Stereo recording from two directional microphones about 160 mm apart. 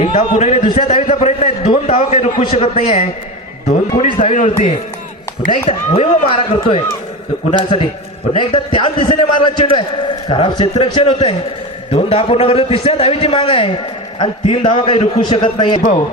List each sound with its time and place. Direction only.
0.2 s a man's voice: 60° left (ahead or behind)
0.4 s a man's voice: 45° left (ahead or behind)
1.0 s a sound: 45° left (ahead or behind)
2.5 s a man's voice: 40° left (ahead or behind)
8.3 s a man's voice: 35° left (ahead or behind)